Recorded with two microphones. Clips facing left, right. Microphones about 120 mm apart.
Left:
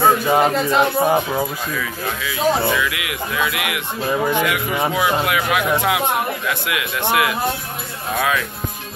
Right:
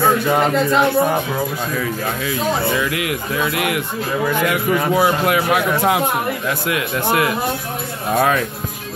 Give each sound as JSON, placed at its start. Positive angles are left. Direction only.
{"t": 0.3, "sound": "speech", "side_deg": 10}
{"t": 1.8, "sound": "a man's voice", "side_deg": -40}
{"t": 4.2, "sound": "speech", "side_deg": 20}
{"t": 4.9, "sound": "a man's voice", "side_deg": -40}